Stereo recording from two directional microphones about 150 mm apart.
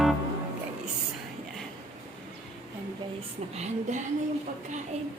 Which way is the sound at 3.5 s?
50° right (ahead or behind).